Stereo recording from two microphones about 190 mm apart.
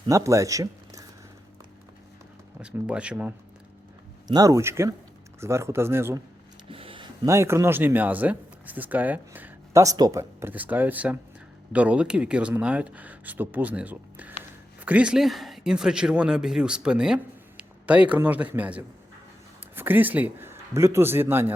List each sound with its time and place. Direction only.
0.1 s speech: 15° right (ahead or behind)
2.6 s speech: 5° right (ahead or behind)
4.3 s speech: 20° right (ahead or behind)
6.7 s a sound: 30° right (ahead or behind)
7.3 s a man's voice: 15° right (ahead or behind)